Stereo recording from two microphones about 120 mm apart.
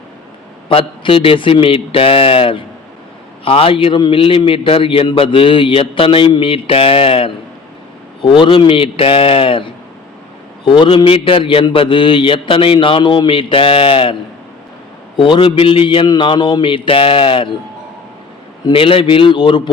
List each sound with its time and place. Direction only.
0.7 s a man's voice: 50° left (ahead or behind)
18.6 s a man's voice: 50° left (ahead or behind)